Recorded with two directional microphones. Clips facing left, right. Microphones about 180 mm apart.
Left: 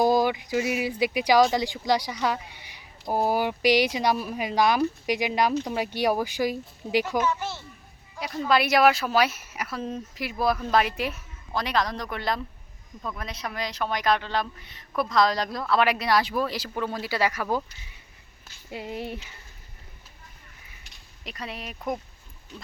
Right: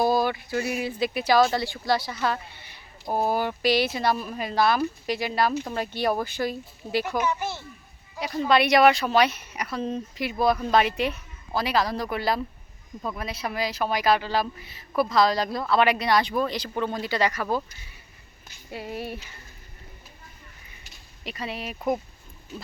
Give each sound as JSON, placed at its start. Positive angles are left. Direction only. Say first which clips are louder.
{"t": 0.0, "sound": "speech", "louder": "left 1 dB", "side_deg": 15}
{"t": 6.8, "sound": "speech", "louder": "left 1 dB", "side_deg": -5}
{"t": 8.1, "sound": "speech", "louder": "right 2 dB", "side_deg": 0}
{"t": 18.7, "sound": "speech", "louder": "even", "side_deg": 20}
{"t": 20.8, "sound": "speech", "louder": "right 4 dB", "side_deg": -5}
{"t": 22.5, "sound": "pig", "louder": "right 4 dB", "side_deg": -5}